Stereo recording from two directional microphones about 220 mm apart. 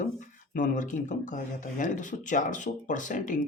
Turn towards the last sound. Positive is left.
turn(degrees=35)  # may be behind; listen again after turning